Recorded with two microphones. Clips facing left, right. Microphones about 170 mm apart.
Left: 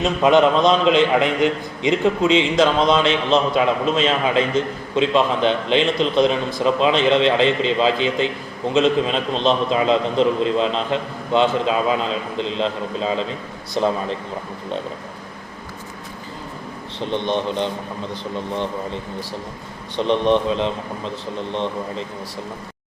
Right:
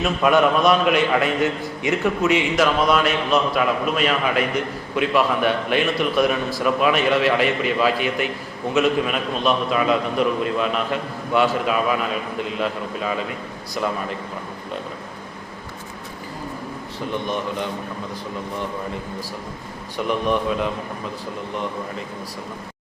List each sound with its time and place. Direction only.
0.0 s a man's voice: 20° left (ahead or behind)
17.0 s a man's voice: 25° left (ahead or behind)
20.0 s a man's voice: 25° left (ahead or behind)